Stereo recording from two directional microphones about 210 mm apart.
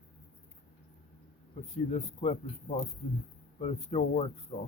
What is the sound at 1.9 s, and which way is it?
Speech, 30° left (ahead or behind).